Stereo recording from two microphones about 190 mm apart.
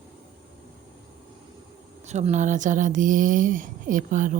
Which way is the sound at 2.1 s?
35° right (ahead or behind).